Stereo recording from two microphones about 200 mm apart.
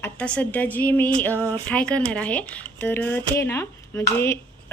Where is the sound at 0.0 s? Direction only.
5° left (ahead or behind).